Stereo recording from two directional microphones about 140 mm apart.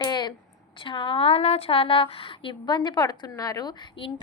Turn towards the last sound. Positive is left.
turn(degrees=30)  # may be behind; listen again after turning